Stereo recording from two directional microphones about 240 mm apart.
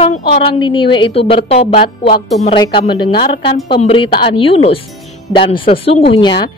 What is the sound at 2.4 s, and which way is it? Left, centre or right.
A woman's voice, centre.